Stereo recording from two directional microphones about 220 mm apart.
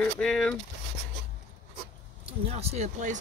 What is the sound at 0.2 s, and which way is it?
Speech, 5° left (ahead or behind).